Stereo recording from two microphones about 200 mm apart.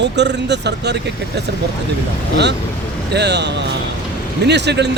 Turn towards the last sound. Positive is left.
turn(degrees=-60)  # may be behind; listen again after turning